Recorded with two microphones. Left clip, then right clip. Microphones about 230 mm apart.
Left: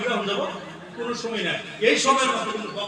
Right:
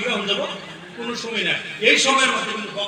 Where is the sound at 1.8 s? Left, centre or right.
Left.